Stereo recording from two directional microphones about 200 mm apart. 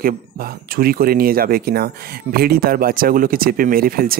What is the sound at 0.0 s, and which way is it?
Speech, 45° right (ahead or behind).